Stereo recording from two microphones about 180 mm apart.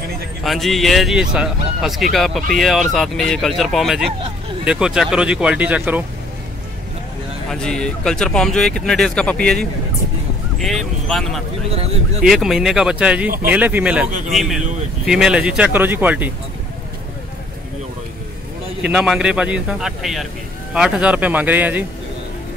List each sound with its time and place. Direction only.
0.4 s speech: centre (ahead or behind)
7.4 s speech: 5° left (ahead or behind)
11.7 s speech: 35° right (ahead or behind)
12.2 s speech: centre (ahead or behind)
18.9 s speech: 5° right (ahead or behind)